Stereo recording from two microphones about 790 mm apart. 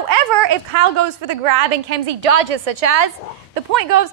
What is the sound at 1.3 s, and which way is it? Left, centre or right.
A woman's voice, right.